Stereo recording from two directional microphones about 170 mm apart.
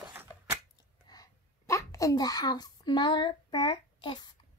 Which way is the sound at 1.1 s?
20° left (ahead or behind).